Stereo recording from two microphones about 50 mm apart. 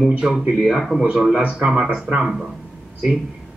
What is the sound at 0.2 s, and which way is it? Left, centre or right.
Speech, centre.